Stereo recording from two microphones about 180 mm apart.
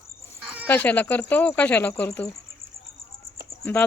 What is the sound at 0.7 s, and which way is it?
Speech, 10° left (ahead or behind).